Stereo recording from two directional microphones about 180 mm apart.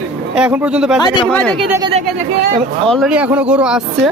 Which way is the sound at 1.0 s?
25° left (ahead or behind).